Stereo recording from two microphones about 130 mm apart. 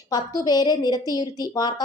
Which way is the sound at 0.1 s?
30° left (ahead or behind).